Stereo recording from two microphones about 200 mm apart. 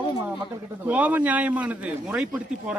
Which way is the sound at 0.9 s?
5° right (ahead or behind).